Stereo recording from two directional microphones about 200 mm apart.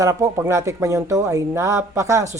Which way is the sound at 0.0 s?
15° right (ahead or behind).